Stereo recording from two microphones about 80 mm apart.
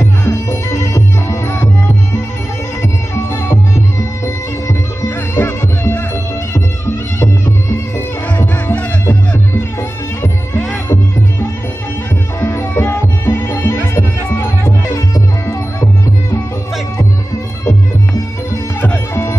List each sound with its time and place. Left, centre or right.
0.3 s music: left
5.3 s music: left
8.4 s music: left
12.4 s music: left